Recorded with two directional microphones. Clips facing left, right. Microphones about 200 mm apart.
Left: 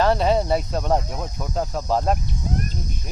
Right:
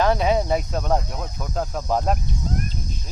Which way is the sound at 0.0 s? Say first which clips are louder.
Left 1 dB; 5° right (ahead or behind).